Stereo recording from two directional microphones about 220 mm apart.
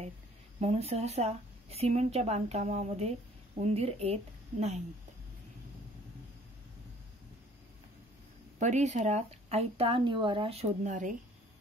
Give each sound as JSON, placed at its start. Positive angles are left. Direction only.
{"t": 0.6, "sound": "a woman's voice", "side_deg": -30}
{"t": 8.5, "sound": "a woman's voice", "side_deg": -35}